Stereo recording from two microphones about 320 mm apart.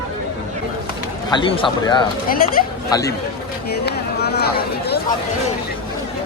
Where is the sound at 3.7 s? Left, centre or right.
Left.